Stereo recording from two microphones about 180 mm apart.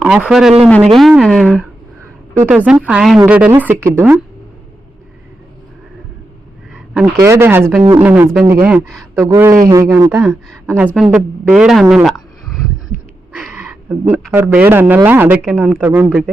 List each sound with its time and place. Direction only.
0.0 s a woman's voice: 5° right (ahead or behind)
6.9 s a woman's voice: 15° right (ahead or behind)
9.1 s a woman's voice: 15° right (ahead or behind); by 11.9 s centre (ahead or behind)
13.3 s a sound: 5° right (ahead or behind)
14.3 s a woman's voice: 10° right (ahead or behind)